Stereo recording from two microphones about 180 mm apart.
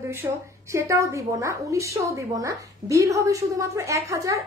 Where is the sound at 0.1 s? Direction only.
15° right (ahead or behind).